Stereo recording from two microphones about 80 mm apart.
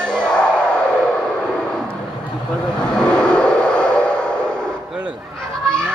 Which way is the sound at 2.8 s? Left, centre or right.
Centre.